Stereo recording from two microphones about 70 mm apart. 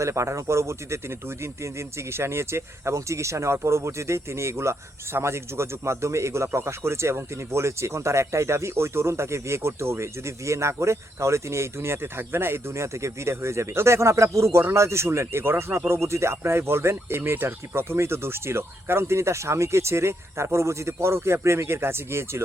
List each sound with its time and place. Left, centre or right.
0.0 s speech: right
2.1 s speech: right